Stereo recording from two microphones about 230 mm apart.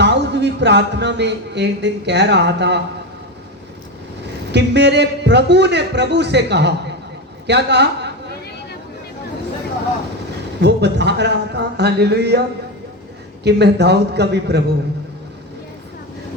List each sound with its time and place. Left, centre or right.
0.0 s a man's voice: right
4.5 s a man's voice: right
10.6 s a man's voice: right
13.4 s a man's voice: right